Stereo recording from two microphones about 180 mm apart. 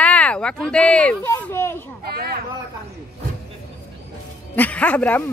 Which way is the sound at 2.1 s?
60° right (ahead or behind).